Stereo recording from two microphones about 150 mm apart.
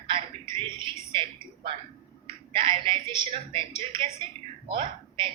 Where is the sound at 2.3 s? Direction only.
35° right (ahead or behind).